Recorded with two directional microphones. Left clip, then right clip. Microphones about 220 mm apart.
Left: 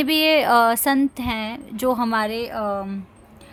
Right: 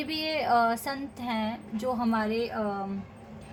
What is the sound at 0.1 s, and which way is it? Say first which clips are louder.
A woman's voice: left 9 dB; 45° left (ahead or behind).